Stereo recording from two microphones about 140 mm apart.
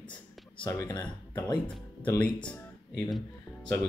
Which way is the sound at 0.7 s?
20° left (ahead or behind).